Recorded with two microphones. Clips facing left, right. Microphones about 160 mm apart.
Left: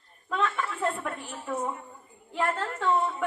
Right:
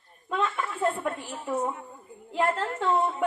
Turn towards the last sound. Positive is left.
turn(degrees=-20)  # may be behind; listen again after turning